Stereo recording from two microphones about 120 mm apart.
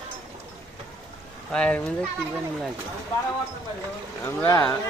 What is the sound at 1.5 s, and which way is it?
Speech, 10° left (ahead or behind).